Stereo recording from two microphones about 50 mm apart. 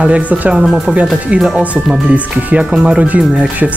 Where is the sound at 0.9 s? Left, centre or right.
Right.